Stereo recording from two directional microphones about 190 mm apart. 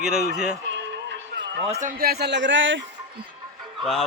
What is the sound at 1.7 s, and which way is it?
A man's voice, 40° right (ahead or behind).